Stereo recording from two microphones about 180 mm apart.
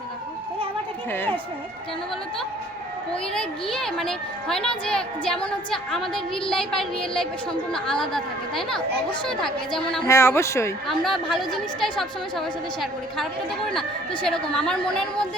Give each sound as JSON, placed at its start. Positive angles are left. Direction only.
{"t": 3.1, "sound": "a woman's voice", "side_deg": 5}
{"t": 10.1, "sound": "speech", "side_deg": 15}
{"t": 10.8, "sound": "a woman's voice", "side_deg": 0}
{"t": 14.3, "sound": "a woman's voice", "side_deg": 5}